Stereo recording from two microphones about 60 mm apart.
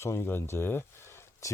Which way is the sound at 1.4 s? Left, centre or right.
Left.